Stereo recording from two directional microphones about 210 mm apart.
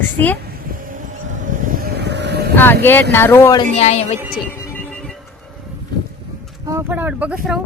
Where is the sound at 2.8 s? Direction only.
10° left (ahead or behind).